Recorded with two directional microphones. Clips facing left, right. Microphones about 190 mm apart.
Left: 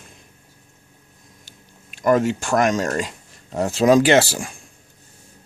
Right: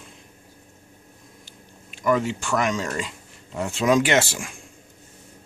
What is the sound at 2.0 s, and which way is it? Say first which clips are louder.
Speech: left 5 dB; 45° left (ahead or behind).